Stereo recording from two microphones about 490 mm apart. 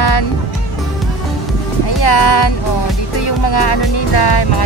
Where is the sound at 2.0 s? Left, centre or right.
Left.